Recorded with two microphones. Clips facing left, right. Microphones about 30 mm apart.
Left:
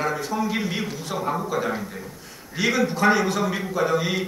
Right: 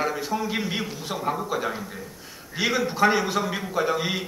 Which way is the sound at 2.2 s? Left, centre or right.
Centre.